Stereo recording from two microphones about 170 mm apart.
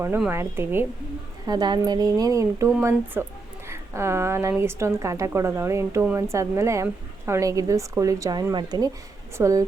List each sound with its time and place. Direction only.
0.3 s speech: 15° right (ahead or behind)
1.5 s speech: 25° right (ahead or behind)